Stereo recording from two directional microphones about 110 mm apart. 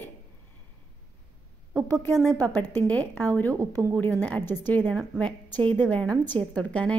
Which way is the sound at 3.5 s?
30° right (ahead or behind).